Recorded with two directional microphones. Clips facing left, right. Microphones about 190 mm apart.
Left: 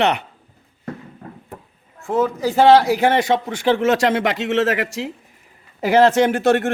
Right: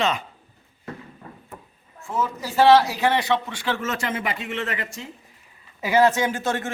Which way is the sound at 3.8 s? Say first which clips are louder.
Left 10 dB; 75° left (ahead or behind).